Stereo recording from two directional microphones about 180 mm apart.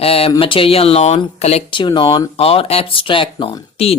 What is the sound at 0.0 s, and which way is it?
A woman's voice, 35° left (ahead or behind).